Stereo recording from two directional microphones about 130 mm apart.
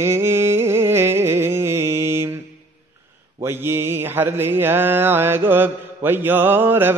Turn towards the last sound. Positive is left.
turn(degrees=-15)  # may be behind; listen again after turning